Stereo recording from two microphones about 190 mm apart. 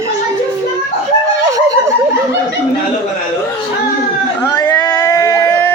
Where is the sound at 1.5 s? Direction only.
20° right (ahead or behind).